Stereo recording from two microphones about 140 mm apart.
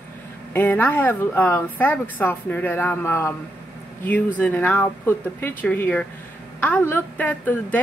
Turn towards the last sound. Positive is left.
turn(degrees=10)  # may be behind; listen again after turning